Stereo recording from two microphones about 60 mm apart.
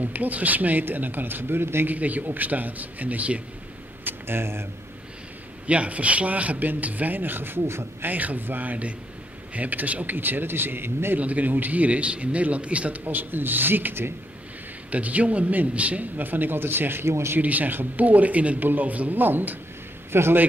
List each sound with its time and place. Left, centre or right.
0.0 s a man's voice: right
2.0 s a man's voice: right
4.0 s speech: right
5.7 s a man's voice: right
8.1 s a man's voice: right
11.1 s a man's voice: right
14.9 s a man's voice: right
17.4 s a man's voice: right